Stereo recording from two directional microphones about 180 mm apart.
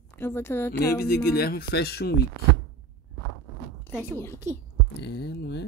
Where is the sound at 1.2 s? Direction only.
60° left (ahead or behind).